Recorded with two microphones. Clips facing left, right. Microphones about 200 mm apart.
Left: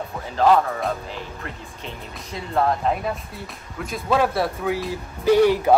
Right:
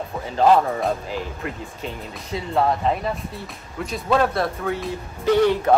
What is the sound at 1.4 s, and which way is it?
Speech, centre (ahead or behind).